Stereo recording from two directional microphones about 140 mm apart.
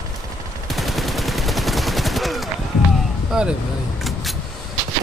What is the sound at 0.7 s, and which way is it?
Gunshot, centre (ahead or behind).